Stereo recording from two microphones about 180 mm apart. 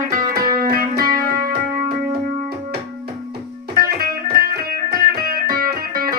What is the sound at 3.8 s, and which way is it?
Music, 55° right (ahead or behind).